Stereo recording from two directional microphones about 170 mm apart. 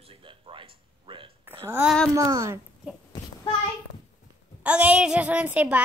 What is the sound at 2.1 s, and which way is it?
Speech, 20° right (ahead or behind).